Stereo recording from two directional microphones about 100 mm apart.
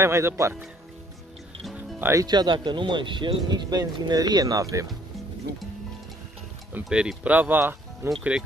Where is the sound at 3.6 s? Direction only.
40° right (ahead or behind).